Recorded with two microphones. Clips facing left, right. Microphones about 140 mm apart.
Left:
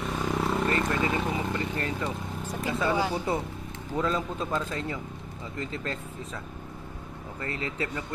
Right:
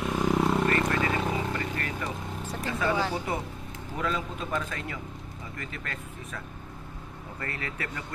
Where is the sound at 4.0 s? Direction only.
30° left (ahead or behind).